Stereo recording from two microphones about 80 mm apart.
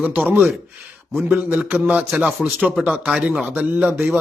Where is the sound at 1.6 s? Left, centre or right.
Centre.